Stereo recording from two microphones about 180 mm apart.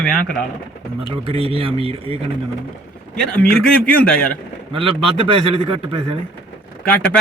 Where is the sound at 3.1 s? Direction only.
5° left (ahead or behind).